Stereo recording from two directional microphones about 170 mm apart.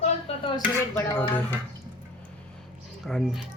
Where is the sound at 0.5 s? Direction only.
15° left (ahead or behind).